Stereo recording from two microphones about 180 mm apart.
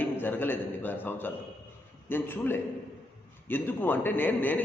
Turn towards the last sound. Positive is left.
turn(degrees=10)  # may be behind; listen again after turning